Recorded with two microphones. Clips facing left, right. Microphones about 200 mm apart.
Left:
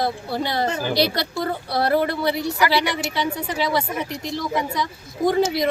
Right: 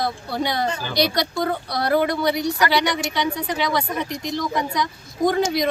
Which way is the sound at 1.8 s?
30° left (ahead or behind).